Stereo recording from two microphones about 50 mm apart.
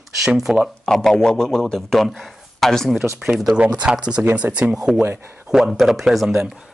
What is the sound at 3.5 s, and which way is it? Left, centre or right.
Speech, right.